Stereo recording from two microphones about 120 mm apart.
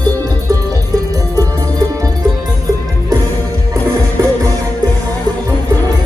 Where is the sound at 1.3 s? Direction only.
30° right (ahead or behind).